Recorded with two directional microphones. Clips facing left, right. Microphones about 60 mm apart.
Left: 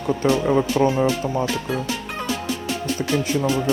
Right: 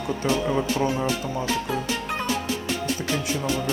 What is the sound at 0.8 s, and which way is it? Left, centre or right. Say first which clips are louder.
Speech: left 8 dB; left.